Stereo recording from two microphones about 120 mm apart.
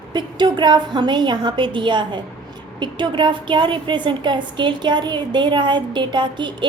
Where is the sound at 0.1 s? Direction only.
35° right (ahead or behind).